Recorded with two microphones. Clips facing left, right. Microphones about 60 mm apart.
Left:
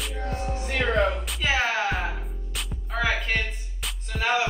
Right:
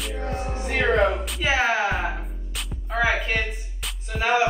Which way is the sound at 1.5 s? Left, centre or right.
Centre.